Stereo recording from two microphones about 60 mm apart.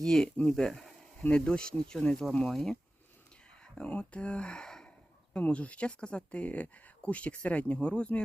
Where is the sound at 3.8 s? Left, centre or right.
Centre.